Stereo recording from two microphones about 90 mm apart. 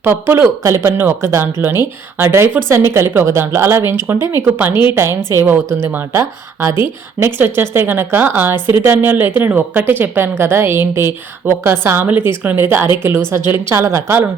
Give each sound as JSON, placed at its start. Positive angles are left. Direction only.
{"t": 0.0, "sound": "a woman's voice", "side_deg": -25}